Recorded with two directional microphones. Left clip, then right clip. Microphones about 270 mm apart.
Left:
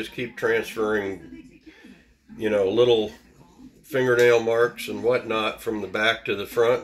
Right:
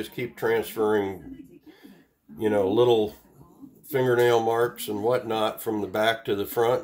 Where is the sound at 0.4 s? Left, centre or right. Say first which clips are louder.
Left 1 dB; right.